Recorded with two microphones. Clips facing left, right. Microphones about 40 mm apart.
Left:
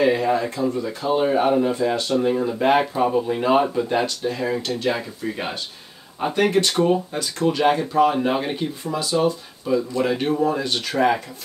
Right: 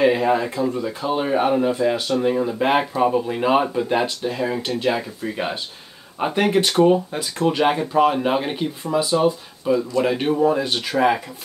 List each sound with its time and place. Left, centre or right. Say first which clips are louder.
0.0 s speech: right 1 dB; centre
0.7 s speech: left 1 dB; centre
1.8 s speech: right 1 dB; centre
4.9 s speech: right 2 dB; centre